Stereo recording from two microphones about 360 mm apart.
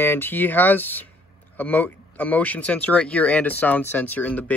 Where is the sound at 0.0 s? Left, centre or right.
Centre.